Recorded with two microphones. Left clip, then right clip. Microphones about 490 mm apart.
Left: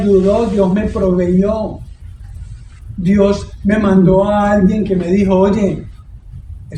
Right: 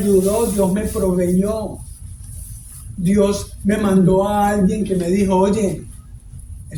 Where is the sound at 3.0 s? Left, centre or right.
Right.